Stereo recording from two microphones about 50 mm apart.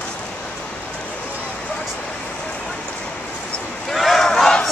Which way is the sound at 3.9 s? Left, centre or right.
Centre.